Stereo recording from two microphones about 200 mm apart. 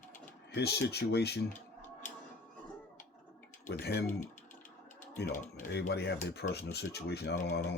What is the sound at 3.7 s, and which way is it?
Speech, 55° left (ahead or behind).